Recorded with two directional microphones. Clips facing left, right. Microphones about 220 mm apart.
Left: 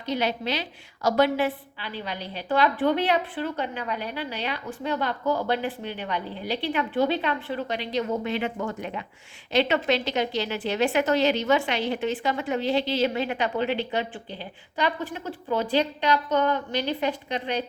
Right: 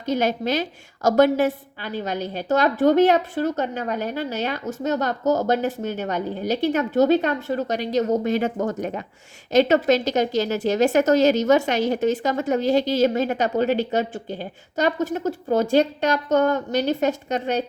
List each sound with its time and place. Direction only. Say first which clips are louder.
0.0 s a woman's voice: right 5 dB; 45° right (ahead or behind)